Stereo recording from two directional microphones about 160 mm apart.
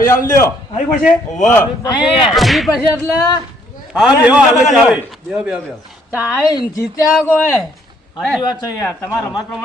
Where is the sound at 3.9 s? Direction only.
5° right (ahead or behind).